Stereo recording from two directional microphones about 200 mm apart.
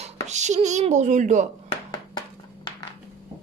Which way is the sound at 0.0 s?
35° right (ahead or behind).